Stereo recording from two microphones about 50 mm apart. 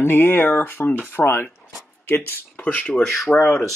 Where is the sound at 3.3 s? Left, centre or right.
Centre.